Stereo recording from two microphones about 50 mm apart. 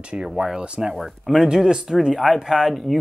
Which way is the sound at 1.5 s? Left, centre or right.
Centre.